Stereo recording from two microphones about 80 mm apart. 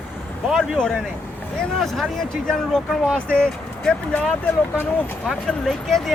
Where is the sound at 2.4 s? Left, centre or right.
Centre.